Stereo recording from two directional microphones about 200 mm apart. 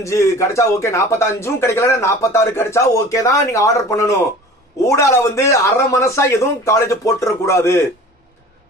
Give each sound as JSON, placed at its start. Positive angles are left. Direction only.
{"t": 0.0, "sound": "speech", "side_deg": 15}